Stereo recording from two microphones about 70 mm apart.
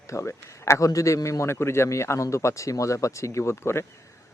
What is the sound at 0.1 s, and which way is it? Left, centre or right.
A man's voice, left.